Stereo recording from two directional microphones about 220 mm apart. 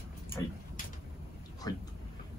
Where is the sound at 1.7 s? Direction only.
15° left (ahead or behind).